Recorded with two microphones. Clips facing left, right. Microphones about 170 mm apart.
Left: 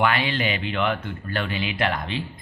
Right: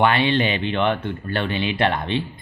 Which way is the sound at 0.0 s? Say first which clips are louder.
Right 5 dB; 30° right (ahead or behind).